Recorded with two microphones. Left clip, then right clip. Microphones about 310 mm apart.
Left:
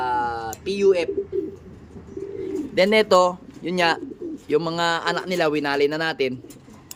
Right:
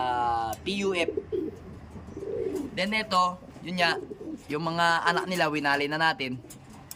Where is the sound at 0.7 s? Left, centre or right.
Centre.